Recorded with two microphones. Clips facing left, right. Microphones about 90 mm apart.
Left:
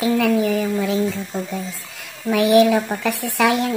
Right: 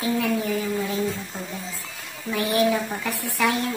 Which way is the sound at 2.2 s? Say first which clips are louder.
Left 8 dB; 75° left (ahead or behind).